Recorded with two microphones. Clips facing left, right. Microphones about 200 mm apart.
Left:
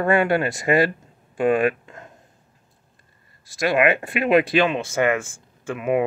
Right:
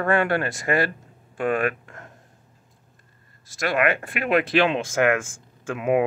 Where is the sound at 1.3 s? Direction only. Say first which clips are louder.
Left 4 dB; 15° left (ahead or behind).